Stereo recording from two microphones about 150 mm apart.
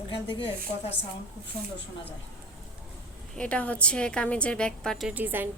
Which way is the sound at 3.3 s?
5° left (ahead or behind).